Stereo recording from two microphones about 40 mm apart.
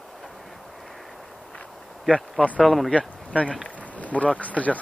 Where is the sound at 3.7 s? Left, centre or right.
Left.